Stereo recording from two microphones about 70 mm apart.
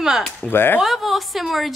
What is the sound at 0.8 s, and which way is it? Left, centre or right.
Speech, centre.